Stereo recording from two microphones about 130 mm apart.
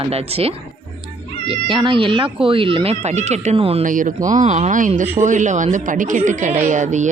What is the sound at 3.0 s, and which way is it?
Speech, 60° right (ahead or behind).